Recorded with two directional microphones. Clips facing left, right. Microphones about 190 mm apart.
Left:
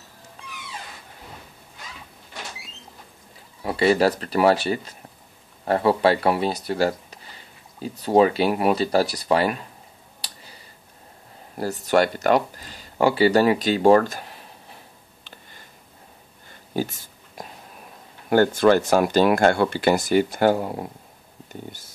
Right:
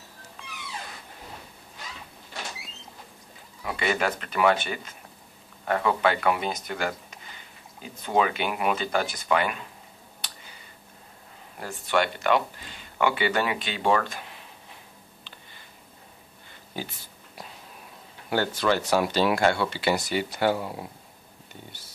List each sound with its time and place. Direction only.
3.6 s speech: 35° left (ahead or behind)
10.2 s tick-tock: 35° left (ahead or behind)
11.5 s speech: 40° left (ahead or behind)
16.7 s a sound: 45° left (ahead or behind)
18.3 s speech: 50° left (ahead or behind)